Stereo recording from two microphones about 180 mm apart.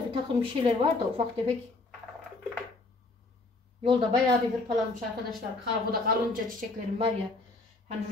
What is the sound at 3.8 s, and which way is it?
Speech, 30° right (ahead or behind).